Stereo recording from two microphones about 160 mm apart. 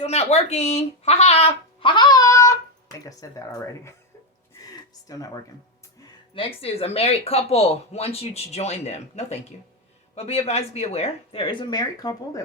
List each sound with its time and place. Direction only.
0.0 s speech: 40° left (ahead or behind); by 3.9 s 20° left (ahead or behind)
4.6 s a sound: 25° left (ahead or behind)
6.0 s speech: 35° left (ahead or behind)